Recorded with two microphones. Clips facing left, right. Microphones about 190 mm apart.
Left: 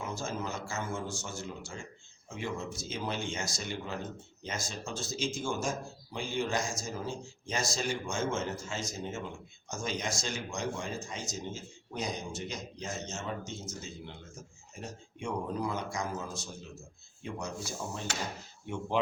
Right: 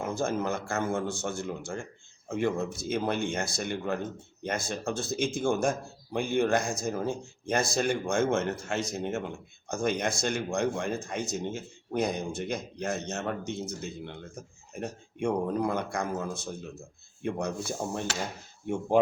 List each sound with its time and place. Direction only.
0.0 s speech: 55° right (ahead or behind)